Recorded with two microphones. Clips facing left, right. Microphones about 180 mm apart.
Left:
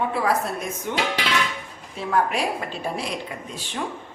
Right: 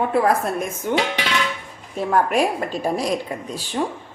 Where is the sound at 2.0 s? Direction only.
45° right (ahead or behind).